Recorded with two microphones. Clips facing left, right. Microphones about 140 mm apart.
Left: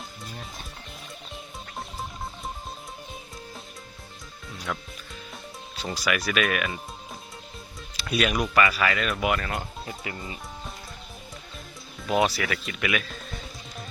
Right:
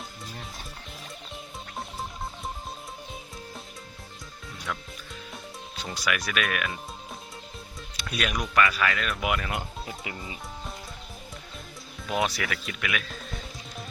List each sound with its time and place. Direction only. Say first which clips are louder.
4.5 s music: left 2 dB; 5° left (ahead or behind)
5.7 s speech: left 3 dB; centre (ahead or behind)
7.9 s speech: left 5 dB; 5° left (ahead or behind)
9.5 s speech: left 1 dB; 15° right (ahead or behind)
12.0 s music: left 4 dB; centre (ahead or behind)